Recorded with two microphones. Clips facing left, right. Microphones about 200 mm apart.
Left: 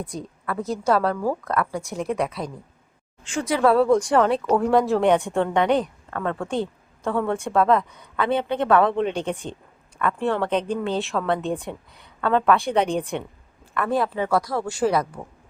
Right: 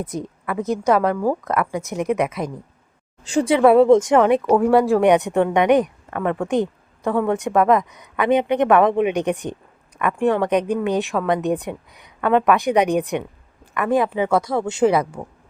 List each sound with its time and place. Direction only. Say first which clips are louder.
0.0 s speech: right 4 dB; 20° right (ahead or behind)
3.2 s speech: right 5 dB; 30° right (ahead or behind)